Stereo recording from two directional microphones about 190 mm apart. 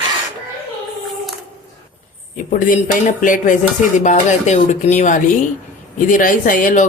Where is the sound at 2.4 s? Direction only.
45° left (ahead or behind).